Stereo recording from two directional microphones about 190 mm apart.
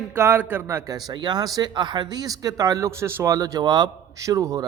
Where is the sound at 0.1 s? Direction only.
10° right (ahead or behind).